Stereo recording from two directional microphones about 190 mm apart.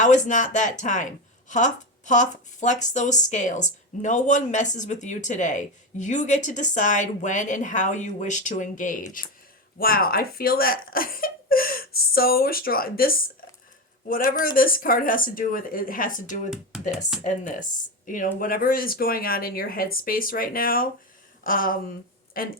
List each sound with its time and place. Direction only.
0.0 s speech: 40° left (ahead or behind)
16.7 s speech: centre (ahead or behind)
17.2 s speech: 40° left (ahead or behind)